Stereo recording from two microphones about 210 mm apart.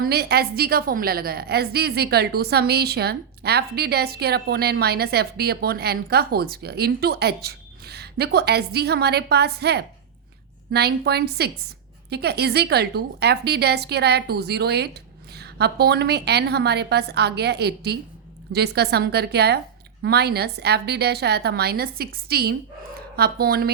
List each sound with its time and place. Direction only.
0.0 s a woman's voice: 50° right (ahead or behind)